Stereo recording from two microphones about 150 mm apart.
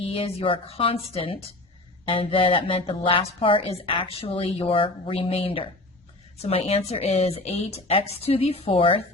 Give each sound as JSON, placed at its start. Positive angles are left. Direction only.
{"t": 0.0, "sound": "a woman's voice", "side_deg": 40}